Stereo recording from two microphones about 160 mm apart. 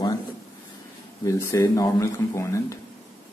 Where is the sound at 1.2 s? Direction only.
20° left (ahead or behind).